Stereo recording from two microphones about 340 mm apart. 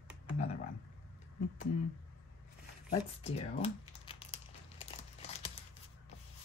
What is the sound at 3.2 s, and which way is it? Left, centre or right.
Speech, centre.